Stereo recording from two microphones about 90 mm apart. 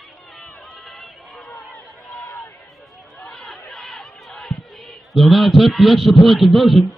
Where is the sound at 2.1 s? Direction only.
25° left (ahead or behind).